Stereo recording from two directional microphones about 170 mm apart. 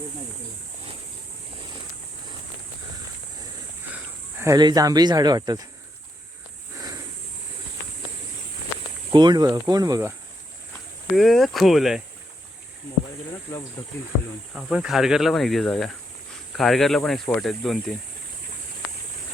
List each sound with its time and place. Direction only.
3.9 s speech: 15° right (ahead or behind)
9.1 s speech: 25° right (ahead or behind)
11.1 s speech: centre (ahead or behind)
13.8 s speech: 15° left (ahead or behind)
14.5 s speech: centre (ahead or behind)